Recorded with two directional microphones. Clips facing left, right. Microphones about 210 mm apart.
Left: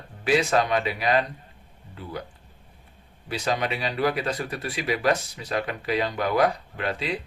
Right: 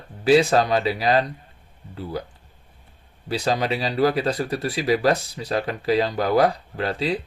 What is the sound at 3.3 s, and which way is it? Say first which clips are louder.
Speech: right 4 dB; 35° right (ahead or behind).